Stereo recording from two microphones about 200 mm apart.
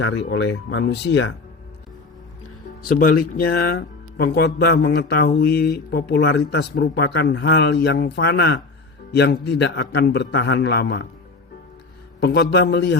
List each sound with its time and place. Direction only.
0.0 s speech: 60° left (ahead or behind)
2.8 s speech: 45° left (ahead or behind)
12.2 s speech: 55° left (ahead or behind)